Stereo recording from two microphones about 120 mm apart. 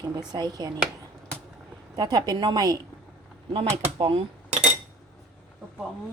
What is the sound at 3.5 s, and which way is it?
Speech, 45° right (ahead or behind).